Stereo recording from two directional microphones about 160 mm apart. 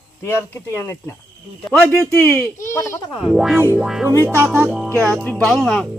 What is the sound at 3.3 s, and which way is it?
Speech, 5° right (ahead or behind).